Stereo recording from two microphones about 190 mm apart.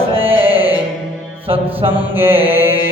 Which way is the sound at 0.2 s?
30° right (ahead or behind).